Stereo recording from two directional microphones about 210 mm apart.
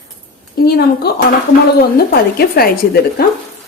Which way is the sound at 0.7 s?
50° left (ahead or behind).